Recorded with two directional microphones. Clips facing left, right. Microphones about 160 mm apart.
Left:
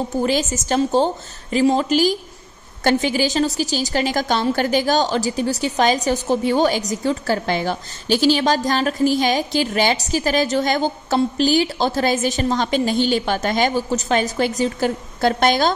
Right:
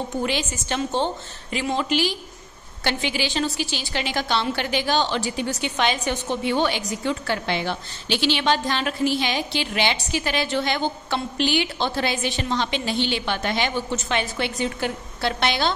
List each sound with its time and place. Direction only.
0.2 s a woman's voice: 40° left (ahead or behind)